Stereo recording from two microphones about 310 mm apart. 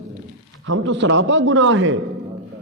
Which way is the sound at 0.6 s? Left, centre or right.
Right.